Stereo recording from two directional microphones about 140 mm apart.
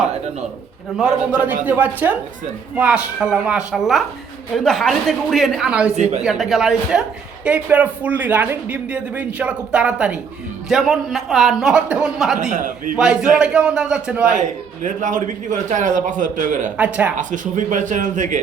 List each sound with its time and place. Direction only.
0.9 s a man's voice: 10° right (ahead or behind)
6.0 s a man's voice: 55° right (ahead or behind)
6.2 s a man's voice: centre (ahead or behind)
12.4 s a man's voice: 60° right (ahead or behind)
13.0 s speech: 5° right (ahead or behind)
14.3 s a man's voice: 60° right (ahead or behind)
16.7 s speech: 10° right (ahead or behind)
17.2 s a man's voice: 65° right (ahead or behind)